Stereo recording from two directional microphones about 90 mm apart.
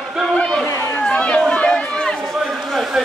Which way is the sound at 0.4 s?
5° left (ahead or behind).